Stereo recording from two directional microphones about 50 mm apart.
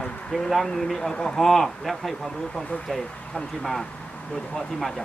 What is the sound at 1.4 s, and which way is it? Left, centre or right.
Speech, centre.